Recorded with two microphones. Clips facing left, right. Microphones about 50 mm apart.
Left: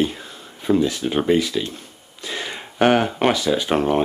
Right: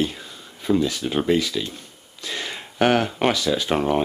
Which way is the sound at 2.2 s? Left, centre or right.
Centre.